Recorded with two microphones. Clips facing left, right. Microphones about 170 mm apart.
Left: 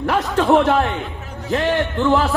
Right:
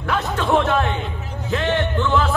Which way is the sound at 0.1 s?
40° left (ahead or behind).